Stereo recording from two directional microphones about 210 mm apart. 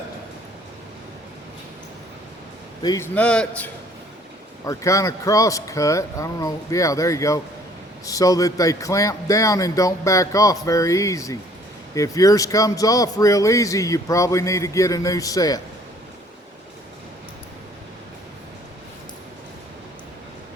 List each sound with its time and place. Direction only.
2.8 s a man's voice: 20° left (ahead or behind)
3.2 s a man's voice: 5° left (ahead or behind)